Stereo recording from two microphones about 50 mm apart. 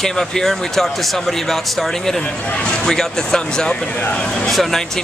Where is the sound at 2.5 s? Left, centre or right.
Left.